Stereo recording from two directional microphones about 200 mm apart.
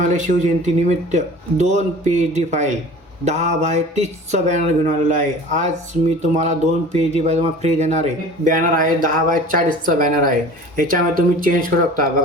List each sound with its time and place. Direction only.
0.0 s speech: 40° right (ahead or behind)